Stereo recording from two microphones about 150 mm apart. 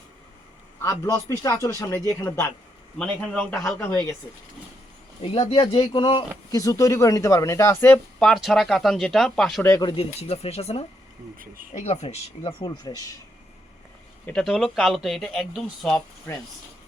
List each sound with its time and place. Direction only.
0.8 s a man's voice: 20° left (ahead or behind)
3.0 s speech: 5° left (ahead or behind)
5.5 s speech: 35° left (ahead or behind)
6.5 s a man's voice: 20° left (ahead or behind)
8.2 s speech: centre (ahead or behind)
9.8 s speech: 35° left (ahead or behind)
11.3 s speech: 70° right (ahead or behind)
11.7 s speech: 50° left (ahead or behind)
12.6 s a man's voice: 25° left (ahead or behind)
14.3 s speech: centre (ahead or behind)
16.3 s speech: 15° left (ahead or behind)